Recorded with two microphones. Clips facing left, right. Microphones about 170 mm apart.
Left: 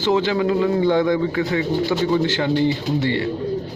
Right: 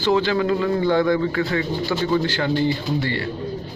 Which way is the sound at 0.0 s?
20° left (ahead or behind).